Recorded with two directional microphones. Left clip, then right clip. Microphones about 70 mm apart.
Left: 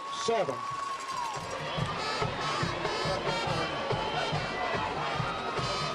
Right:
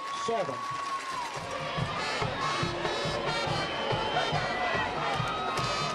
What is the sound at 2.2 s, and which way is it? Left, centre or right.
Music, centre.